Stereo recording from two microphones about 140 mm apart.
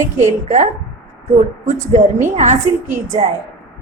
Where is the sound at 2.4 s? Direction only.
60° right (ahead or behind).